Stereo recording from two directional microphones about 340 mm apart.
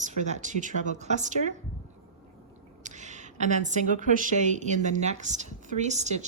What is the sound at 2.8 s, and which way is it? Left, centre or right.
Speech, right.